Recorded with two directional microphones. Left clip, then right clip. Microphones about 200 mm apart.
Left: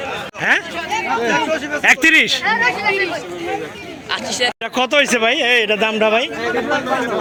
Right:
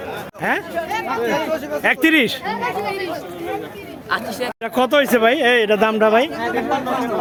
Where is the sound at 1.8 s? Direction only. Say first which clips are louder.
Left 4 dB; 5° right (ahead or behind).